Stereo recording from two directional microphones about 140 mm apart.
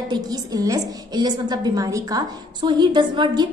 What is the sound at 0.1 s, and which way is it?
A woman's voice, 25° right (ahead or behind).